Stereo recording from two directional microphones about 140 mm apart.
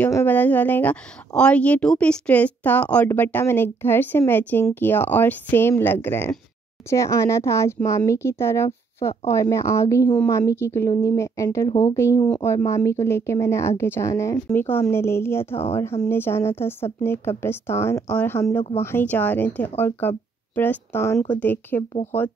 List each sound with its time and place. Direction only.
0.0 s a woman's voice: 15° left (ahead or behind)